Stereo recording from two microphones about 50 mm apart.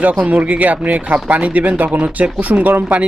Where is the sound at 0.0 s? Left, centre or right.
Right.